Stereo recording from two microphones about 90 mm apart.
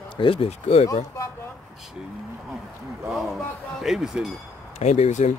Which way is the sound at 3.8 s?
5° right (ahead or behind).